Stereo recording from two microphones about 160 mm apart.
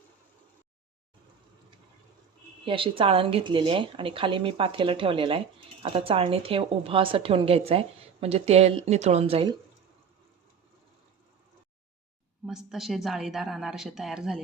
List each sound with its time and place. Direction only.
2.6 s a woman's voice: 35° right (ahead or behind)
12.5 s a woman's voice: centre (ahead or behind)